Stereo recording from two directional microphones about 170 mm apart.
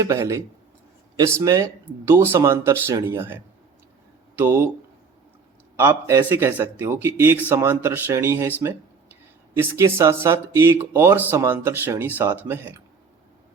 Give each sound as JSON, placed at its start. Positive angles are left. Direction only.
{"t": 0.0, "sound": "speech", "side_deg": -15}
{"t": 5.7, "sound": "speech", "side_deg": -15}